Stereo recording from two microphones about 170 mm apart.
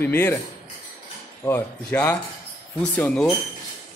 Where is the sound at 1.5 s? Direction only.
10° left (ahead or behind).